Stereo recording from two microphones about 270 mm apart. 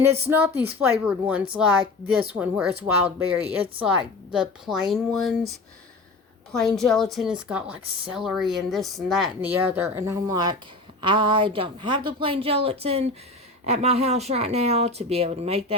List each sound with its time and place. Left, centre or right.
0.3 s a woman's voice: centre; by 15.6 s right